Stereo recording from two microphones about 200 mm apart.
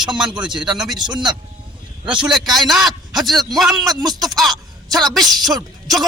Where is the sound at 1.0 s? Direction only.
20° right (ahead or behind).